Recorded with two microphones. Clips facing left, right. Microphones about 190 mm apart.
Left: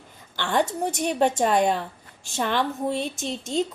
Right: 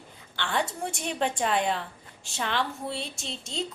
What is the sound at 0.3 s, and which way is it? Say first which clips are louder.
A woman's voice: left 6 dB; 45° left (ahead or behind).